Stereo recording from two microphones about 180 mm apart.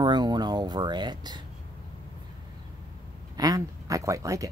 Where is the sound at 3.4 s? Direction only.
20° right (ahead or behind).